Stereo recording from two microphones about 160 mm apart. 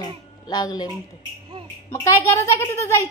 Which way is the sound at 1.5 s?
30° right (ahead or behind).